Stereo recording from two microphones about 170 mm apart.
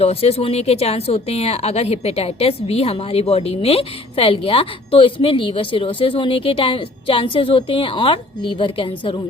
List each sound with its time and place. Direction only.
0.0 s speech: 35° left (ahead or behind)